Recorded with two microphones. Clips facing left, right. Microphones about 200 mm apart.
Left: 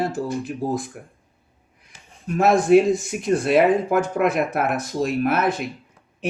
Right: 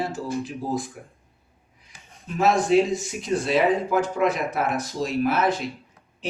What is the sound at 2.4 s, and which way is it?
Speech, 55° left (ahead or behind).